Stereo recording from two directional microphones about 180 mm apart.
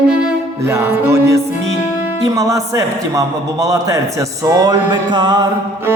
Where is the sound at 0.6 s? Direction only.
15° right (ahead or behind).